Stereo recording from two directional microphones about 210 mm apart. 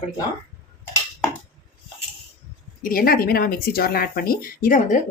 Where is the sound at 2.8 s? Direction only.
45° left (ahead or behind).